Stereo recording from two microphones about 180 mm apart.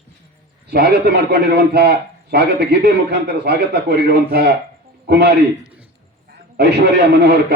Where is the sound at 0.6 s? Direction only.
65° right (ahead or behind).